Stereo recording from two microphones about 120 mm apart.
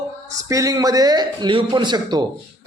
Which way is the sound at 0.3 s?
30° right (ahead or behind).